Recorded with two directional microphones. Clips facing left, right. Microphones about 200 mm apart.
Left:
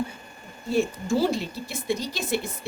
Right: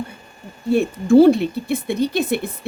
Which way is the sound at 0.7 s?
60° right (ahead or behind).